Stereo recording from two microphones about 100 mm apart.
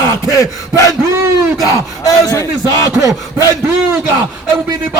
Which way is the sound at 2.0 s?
35° left (ahead or behind).